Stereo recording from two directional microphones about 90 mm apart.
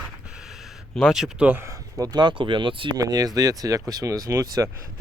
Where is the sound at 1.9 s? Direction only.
45° right (ahead or behind); by 3.0 s 65° right (ahead or behind).